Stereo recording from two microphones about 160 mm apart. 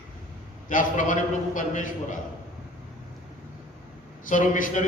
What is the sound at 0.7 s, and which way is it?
A man's voice, 55° left (ahead or behind).